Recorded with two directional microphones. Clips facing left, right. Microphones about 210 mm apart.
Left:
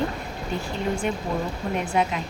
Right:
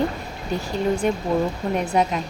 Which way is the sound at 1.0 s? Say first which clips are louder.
Right 5 dB; 40° right (ahead or behind).